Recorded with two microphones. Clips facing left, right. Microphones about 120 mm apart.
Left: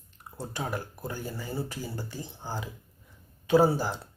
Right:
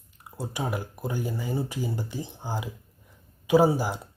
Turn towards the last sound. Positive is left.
turn(degrees=-15)  # may be behind; listen again after turning